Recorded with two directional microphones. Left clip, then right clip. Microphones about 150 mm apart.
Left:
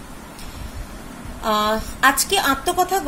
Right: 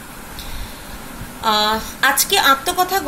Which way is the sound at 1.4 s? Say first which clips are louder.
Right 3 dB; 40° left (ahead or behind).